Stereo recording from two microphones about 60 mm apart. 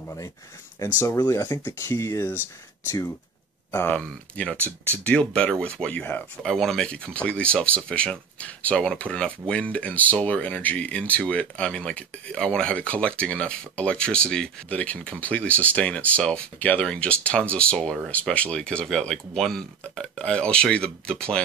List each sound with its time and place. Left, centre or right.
1.0 s speech: left
3.9 s speech: centre
6.4 s speech: centre
6.9 s speech: centre